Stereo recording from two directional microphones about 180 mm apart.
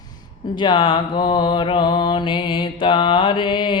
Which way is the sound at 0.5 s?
25° left (ahead or behind).